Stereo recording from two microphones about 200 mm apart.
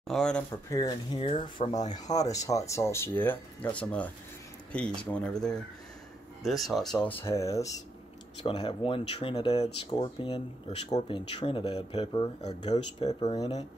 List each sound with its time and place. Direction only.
0.1 s speech: 5° left (ahead or behind)
0.7 s speech: 20° left (ahead or behind)
8.5 s speech: 25° left (ahead or behind)